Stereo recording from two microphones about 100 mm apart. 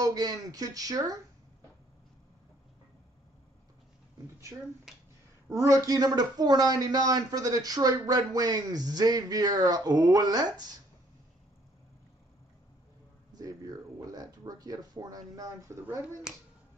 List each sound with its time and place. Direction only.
0.0 s speech: 40° right (ahead or behind)
4.9 s finger snapping: 5° right (ahead or behind)
5.5 s speech: 35° right (ahead or behind)
13.3 s a sound: 40° right (ahead or behind)